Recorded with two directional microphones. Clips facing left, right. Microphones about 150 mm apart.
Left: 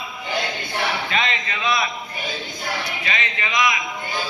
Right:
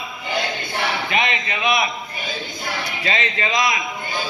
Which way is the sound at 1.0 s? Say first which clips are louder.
Right 2 dB; 15° right (ahead or behind).